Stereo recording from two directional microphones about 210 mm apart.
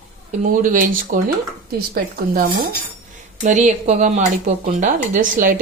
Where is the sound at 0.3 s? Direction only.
40° right (ahead or behind).